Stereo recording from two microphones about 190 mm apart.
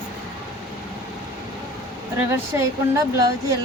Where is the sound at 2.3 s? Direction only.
15° right (ahead or behind).